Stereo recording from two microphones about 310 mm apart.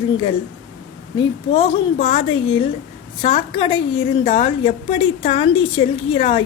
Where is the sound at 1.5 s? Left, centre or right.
Centre.